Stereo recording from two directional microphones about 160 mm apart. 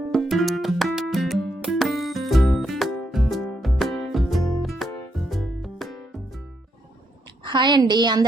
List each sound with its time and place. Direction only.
0.1 s music: centre (ahead or behind)
7.4 s a woman's voice: 30° right (ahead or behind)